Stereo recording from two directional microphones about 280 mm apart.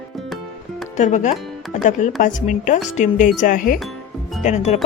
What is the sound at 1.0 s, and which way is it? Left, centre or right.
Speech, left.